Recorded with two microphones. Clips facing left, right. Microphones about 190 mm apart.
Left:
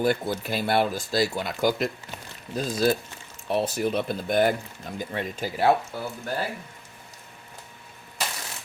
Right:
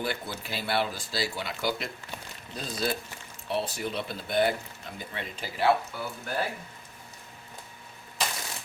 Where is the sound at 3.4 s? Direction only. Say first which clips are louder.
Left 6 dB; 50° left (ahead or behind).